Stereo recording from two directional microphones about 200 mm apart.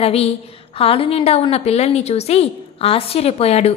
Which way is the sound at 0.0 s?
30° left (ahead or behind).